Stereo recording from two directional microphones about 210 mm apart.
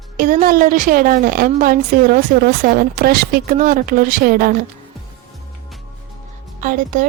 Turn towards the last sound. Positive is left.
turn(degrees=-40)  # may be behind; listen again after turning